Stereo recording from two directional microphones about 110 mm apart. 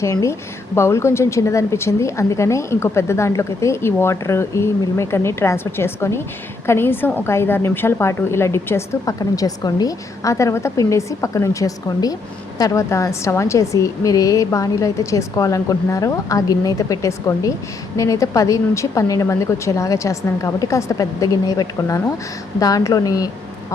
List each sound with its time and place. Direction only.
0.0 s a woman's voice: 30° left (ahead or behind)